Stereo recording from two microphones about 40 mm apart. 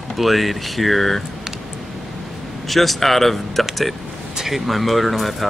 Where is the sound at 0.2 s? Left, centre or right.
Centre.